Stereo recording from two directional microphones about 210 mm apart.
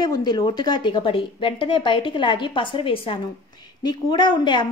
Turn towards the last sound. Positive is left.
turn(degrees=20)  # may be behind; listen again after turning